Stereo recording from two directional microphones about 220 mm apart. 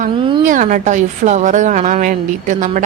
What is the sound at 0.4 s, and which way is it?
A woman's voice, 35° right (ahead or behind).